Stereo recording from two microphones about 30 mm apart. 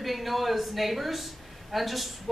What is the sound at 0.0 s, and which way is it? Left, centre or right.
Speech, centre.